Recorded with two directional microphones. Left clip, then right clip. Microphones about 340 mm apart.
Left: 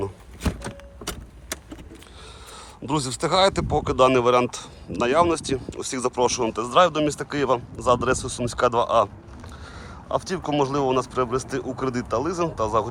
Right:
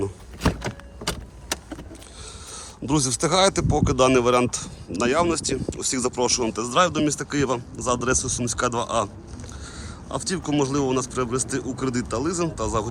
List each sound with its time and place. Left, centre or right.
0.4 s vehicle: right
2.8 s speech: centre
10.1 s speech: centre